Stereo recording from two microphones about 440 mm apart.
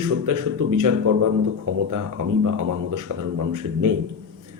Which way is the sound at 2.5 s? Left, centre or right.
Right.